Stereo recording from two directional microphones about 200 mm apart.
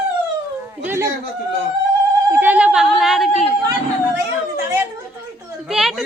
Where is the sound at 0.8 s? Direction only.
15° right (ahead or behind).